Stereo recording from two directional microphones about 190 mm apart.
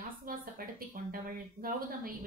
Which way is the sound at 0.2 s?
50° right (ahead or behind).